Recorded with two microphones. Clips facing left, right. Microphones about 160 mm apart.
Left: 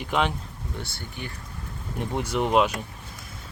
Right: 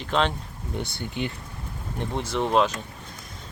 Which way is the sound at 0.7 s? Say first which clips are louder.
Right 8 dB; 20° right (ahead or behind).